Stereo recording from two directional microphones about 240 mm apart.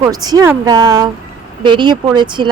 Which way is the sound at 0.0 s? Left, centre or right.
Centre.